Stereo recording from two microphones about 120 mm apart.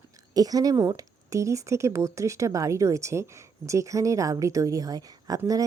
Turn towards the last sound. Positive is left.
turn(degrees=-30)  # may be behind; listen again after turning